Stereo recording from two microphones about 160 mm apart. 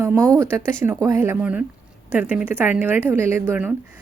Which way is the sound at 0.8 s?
20° right (ahead or behind).